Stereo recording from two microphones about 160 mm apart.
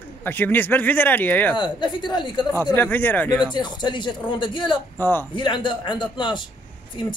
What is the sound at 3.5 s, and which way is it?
Speech, 25° left (ahead or behind).